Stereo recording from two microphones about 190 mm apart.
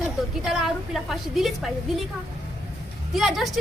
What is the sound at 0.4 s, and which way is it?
A woman's voice, centre (ahead or behind).